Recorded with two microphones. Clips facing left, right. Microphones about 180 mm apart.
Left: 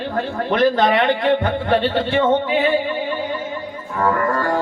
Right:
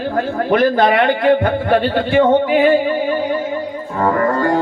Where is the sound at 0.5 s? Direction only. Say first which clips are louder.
Right 2 dB; 10° right (ahead or behind).